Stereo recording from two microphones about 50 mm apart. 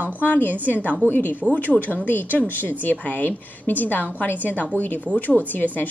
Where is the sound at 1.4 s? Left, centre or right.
Centre.